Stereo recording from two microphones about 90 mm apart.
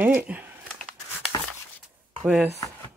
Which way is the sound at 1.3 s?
50° left (ahead or behind).